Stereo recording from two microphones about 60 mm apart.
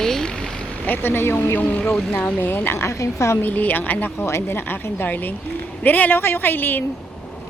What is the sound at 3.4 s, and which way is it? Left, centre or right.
A woman's voice, left.